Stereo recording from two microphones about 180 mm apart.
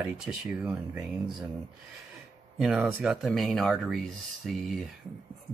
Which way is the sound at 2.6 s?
5° right (ahead or behind).